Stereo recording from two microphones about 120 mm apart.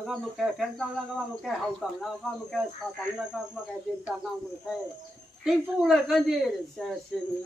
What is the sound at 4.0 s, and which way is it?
Speech, 5° right (ahead or behind).